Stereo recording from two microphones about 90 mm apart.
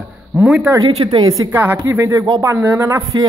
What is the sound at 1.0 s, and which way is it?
Speech, 45° right (ahead or behind).